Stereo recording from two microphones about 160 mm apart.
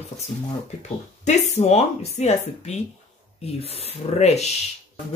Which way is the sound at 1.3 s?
45° left (ahead or behind).